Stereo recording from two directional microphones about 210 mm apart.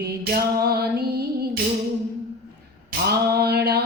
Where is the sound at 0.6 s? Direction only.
50° right (ahead or behind).